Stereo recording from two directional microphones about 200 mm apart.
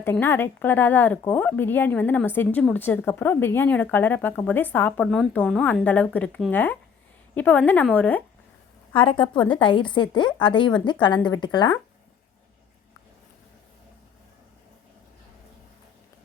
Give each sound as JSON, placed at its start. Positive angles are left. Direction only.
{"t": 0.0, "sound": "speech", "side_deg": 10}
{"t": 8.9, "sound": "a woman's voice", "side_deg": 25}